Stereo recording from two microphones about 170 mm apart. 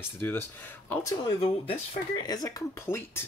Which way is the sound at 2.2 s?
20° left (ahead or behind).